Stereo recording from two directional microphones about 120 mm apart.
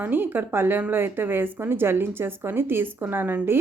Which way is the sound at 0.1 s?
15° right (ahead or behind).